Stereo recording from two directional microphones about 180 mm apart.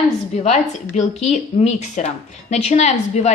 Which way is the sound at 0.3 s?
40° left (ahead or behind).